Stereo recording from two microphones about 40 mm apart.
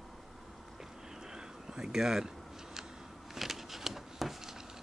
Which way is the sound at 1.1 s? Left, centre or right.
Centre.